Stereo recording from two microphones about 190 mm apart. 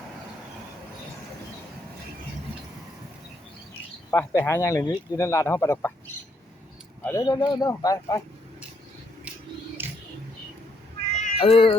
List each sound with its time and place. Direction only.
4.1 s speech: 10° left (ahead or behind)
7.0 s speech: 15° left (ahead or behind)
9.8 s a sound: 10° right (ahead or behind)
11.2 s cat: 30° left (ahead or behind)